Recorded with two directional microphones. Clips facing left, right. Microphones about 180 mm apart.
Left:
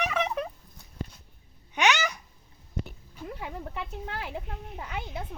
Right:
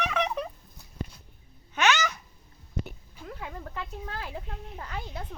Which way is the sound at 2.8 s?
Centre (ahead or behind).